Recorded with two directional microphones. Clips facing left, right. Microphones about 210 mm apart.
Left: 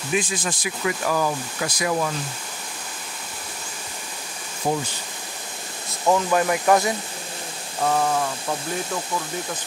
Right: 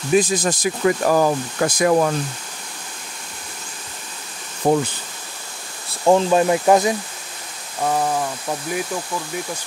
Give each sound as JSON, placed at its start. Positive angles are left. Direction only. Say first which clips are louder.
{"t": 0.1, "sound": "speech", "louder": "right 8 dB", "side_deg": -40}
{"t": 4.6, "sound": "bee", "louder": "right 7 dB", "side_deg": -60}
{"t": 6.0, "sound": "speech", "louder": "right 5 dB", "side_deg": -25}
{"t": 7.8, "sound": "a sound", "louder": "right 1 dB", "side_deg": -10}